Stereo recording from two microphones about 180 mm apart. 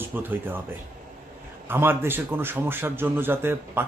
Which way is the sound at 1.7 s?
10° right (ahead or behind).